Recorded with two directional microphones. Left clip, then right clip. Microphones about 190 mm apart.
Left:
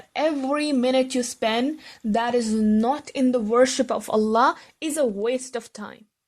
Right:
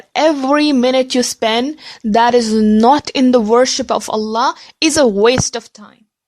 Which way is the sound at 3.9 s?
30° right (ahead or behind).